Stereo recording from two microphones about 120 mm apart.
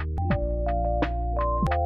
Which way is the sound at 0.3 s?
Centre (ahead or behind).